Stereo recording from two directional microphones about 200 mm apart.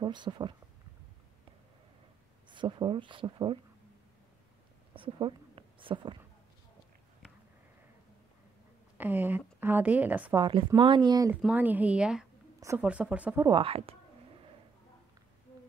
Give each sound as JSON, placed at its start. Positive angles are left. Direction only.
{"t": 0.0, "sound": "speech", "side_deg": -20}
{"t": 2.5, "sound": "speech", "side_deg": -25}
{"t": 4.9, "sound": "a sound", "side_deg": -25}
{"t": 8.9, "sound": "speech", "side_deg": -10}
{"t": 10.3, "sound": "speech", "side_deg": -20}
{"t": 11.4, "sound": "a woman's voice", "side_deg": -10}
{"t": 13.5, "sound": "speech", "side_deg": -25}